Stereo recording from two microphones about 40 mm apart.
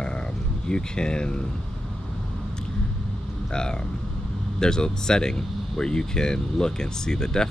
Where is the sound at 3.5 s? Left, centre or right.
Centre.